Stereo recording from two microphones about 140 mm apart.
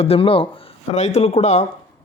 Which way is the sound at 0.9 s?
50° left (ahead or behind).